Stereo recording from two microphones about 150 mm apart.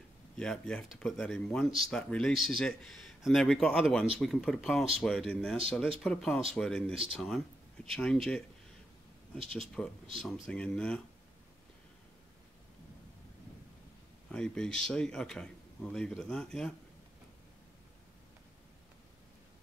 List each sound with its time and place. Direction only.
0.4 s a man's voice: 5° left (ahead or behind)
9.5 s a man's voice: centre (ahead or behind)
14.3 s a man's voice: 5° left (ahead or behind)